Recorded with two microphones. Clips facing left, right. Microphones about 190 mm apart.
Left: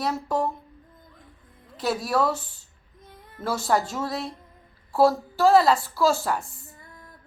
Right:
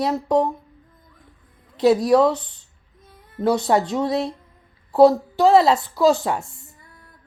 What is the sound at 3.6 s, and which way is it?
Speech, 25° right (ahead or behind).